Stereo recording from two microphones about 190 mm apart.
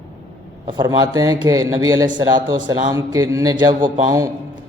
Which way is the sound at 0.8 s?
20° right (ahead or behind).